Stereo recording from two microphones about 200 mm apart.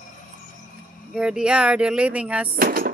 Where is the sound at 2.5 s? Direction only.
45° right (ahead or behind).